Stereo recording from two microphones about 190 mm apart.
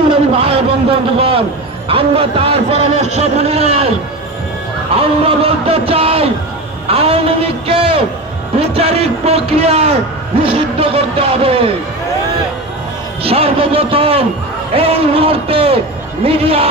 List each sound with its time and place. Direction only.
0.3 s a sound: 30° right (ahead or behind)
1.9 s a man's voice: 30° right (ahead or behind)
4.9 s a man's voice: 30° right (ahead or behind)
13.2 s a man's voice: 30° right (ahead or behind)